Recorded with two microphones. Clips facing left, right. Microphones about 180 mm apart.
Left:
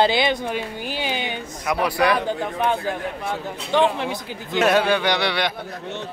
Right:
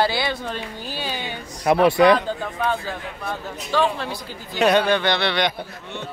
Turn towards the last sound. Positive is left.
turn(degrees=10)  # may be behind; listen again after turning